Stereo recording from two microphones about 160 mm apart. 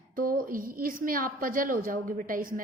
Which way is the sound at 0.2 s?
60° right (ahead or behind).